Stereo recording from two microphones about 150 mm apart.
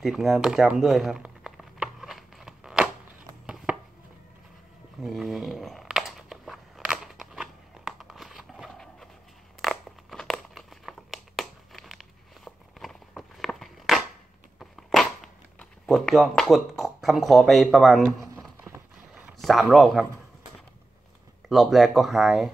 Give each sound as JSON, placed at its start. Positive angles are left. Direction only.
{"t": 0.0, "sound": "crumpling", "side_deg": 0}
{"t": 3.4, "sound": "chopping", "side_deg": -5}
{"t": 5.0, "sound": "a sound", "side_deg": 0}
{"t": 9.6, "sound": "crumpling", "side_deg": 0}
{"t": 14.6, "sound": "a sound", "side_deg": 0}
{"t": 19.4, "sound": "speech", "side_deg": 0}
{"t": 21.5, "sound": "speech", "side_deg": 0}